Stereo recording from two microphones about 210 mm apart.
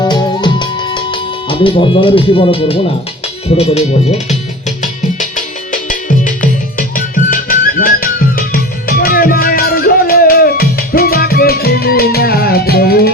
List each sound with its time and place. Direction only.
0.0 s music: 20° left (ahead or behind)
3.5 s speech: 30° left (ahead or behind)
5.9 s music: 40° left (ahead or behind)